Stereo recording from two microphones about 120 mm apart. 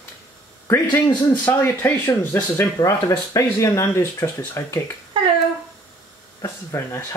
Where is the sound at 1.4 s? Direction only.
20° left (ahead or behind).